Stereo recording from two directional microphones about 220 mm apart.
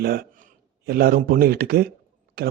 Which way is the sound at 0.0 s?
45° right (ahead or behind).